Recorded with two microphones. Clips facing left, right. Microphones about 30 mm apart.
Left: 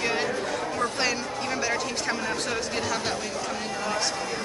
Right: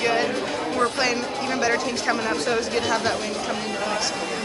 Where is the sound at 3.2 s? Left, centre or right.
Right.